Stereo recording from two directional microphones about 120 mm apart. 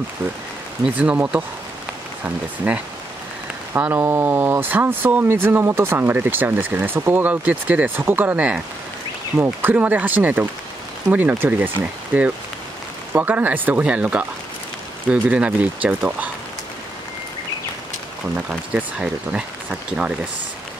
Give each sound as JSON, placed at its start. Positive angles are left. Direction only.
{"t": 0.8, "sound": "speech", "side_deg": -10}
{"t": 2.6, "sound": "speech", "side_deg": -10}
{"t": 18.3, "sound": "speech", "side_deg": -10}